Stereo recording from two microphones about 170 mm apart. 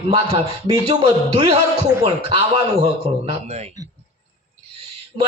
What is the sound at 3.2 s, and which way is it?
Speech, 40° right (ahead or behind).